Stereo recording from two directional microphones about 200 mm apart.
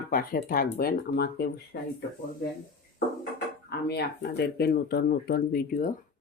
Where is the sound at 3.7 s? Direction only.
55° left (ahead or behind).